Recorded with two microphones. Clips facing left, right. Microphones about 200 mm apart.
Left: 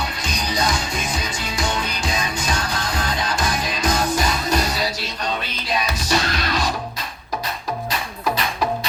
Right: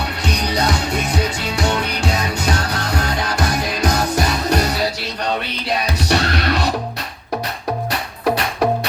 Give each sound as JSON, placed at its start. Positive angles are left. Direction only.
{"t": 0.3, "sound": "music", "side_deg": -65}
{"t": 6.1, "sound": "music", "side_deg": -65}
{"t": 7.9, "sound": "music", "side_deg": -60}